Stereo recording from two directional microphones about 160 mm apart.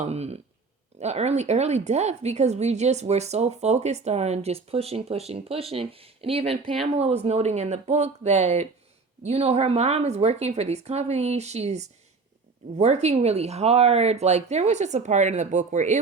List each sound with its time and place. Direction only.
0.0 s speech: 40° right (ahead or behind)